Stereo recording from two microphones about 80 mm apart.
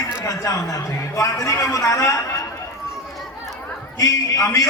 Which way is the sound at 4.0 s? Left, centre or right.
Left.